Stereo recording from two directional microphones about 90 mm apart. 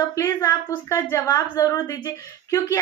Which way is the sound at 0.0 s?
35° left (ahead or behind).